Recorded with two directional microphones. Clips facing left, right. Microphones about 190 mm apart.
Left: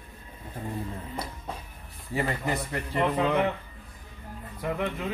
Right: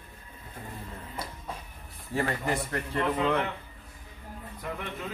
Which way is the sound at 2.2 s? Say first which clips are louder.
Even; 15° left (ahead or behind).